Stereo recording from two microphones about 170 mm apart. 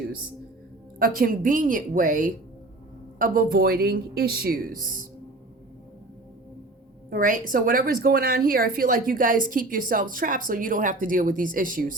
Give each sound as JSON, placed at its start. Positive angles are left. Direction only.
{"t": 0.9, "sound": "a woman's voice", "side_deg": -60}
{"t": 7.1, "sound": "a woman's voice", "side_deg": -50}